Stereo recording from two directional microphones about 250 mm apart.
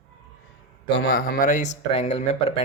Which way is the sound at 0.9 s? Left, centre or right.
Left.